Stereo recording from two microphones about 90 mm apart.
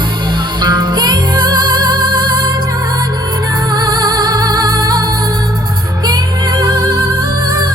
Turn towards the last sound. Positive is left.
turn(degrees=-45)  # may be behind; listen again after turning